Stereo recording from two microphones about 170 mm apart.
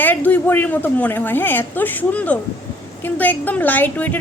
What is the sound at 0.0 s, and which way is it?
A woman's voice, 10° left (ahead or behind).